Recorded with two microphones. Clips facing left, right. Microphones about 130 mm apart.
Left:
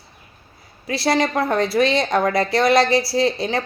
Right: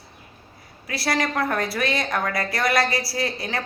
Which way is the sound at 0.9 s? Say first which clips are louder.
Left 5 dB; 25° left (ahead or behind).